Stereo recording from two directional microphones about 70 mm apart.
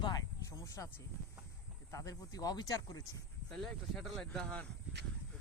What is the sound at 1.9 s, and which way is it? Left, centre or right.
Speech, left.